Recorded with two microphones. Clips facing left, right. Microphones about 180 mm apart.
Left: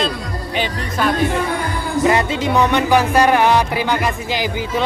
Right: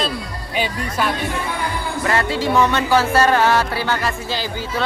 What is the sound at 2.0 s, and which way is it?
Speech, 20° left (ahead or behind).